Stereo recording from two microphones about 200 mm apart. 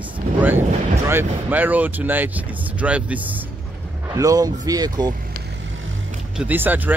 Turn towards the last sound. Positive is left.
turn(degrees=-10)  # may be behind; listen again after turning